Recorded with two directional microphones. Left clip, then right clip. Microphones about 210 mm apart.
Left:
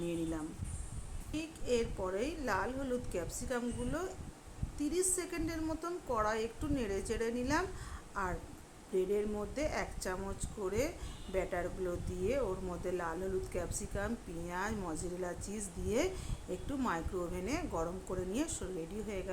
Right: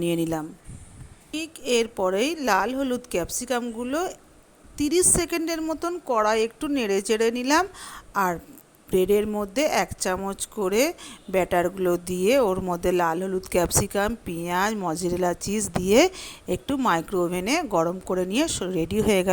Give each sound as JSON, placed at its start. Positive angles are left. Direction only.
{"t": 0.0, "sound": "speech", "side_deg": -45}